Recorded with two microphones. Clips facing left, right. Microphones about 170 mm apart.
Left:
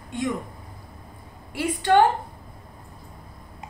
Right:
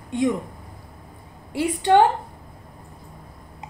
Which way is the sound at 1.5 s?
25° right (ahead or behind).